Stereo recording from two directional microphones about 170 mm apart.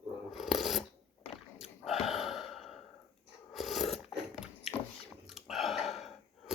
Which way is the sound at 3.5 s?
Centre (ahead or behind).